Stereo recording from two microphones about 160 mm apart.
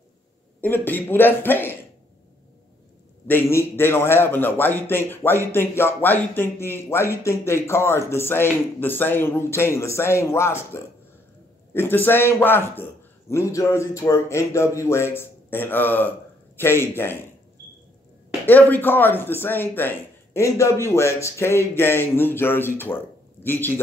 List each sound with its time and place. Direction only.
0.6 s a man's voice: 10° left (ahead or behind)
3.3 s a man's voice: 15° left (ahead or behind)
18.4 s a man's voice: 10° left (ahead or behind)